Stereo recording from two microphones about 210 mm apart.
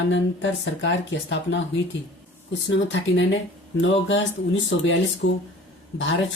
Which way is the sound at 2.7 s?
60° left (ahead or behind).